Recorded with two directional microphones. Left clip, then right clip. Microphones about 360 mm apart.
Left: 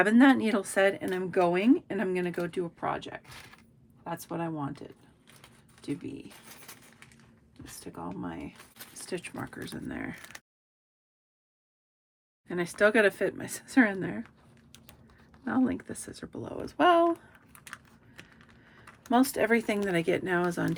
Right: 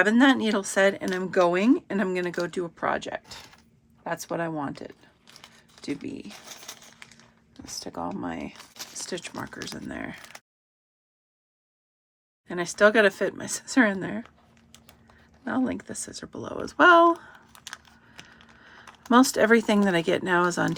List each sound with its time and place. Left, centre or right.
0.0 s speech: centre
7.8 s speech: centre
12.5 s speech: centre
18.7 s speech: centre